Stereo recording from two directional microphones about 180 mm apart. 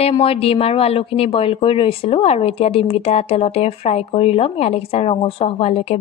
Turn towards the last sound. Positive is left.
turn(degrees=35)  # may be behind; listen again after turning